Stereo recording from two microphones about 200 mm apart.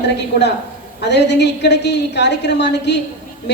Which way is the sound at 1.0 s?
60° left (ahead or behind).